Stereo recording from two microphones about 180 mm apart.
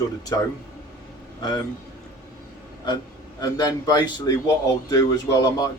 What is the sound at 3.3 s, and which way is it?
Speech, 20° left (ahead or behind).